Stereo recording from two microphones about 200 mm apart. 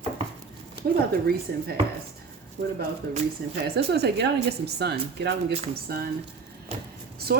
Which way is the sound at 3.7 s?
55° right (ahead or behind).